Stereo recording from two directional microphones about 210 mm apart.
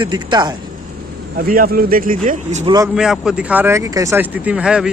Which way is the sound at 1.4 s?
45° right (ahead or behind).